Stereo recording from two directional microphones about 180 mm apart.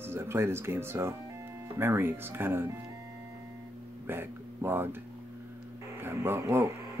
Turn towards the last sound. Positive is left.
turn(degrees=-15)  # may be behind; listen again after turning